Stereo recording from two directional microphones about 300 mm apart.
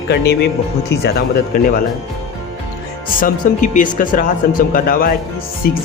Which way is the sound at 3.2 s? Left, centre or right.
Left.